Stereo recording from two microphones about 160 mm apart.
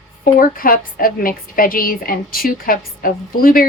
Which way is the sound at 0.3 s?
65° left (ahead or behind).